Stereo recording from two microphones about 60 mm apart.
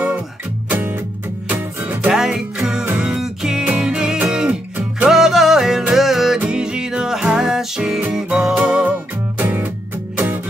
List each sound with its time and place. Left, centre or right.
0.7 s music: right
2.1 s music: centre
3.6 s music: right
3.9 s music: centre
6.4 s music: centre; by 10.4 s right